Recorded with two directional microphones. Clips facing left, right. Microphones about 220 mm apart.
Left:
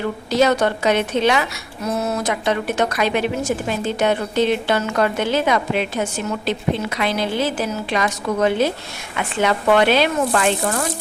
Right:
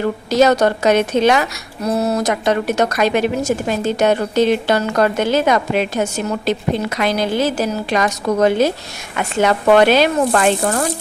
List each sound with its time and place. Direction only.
0.3 s speech: 40° right (ahead or behind)